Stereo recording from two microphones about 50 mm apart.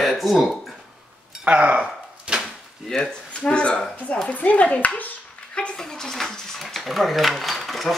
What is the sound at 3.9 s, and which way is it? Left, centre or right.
Dishes, left.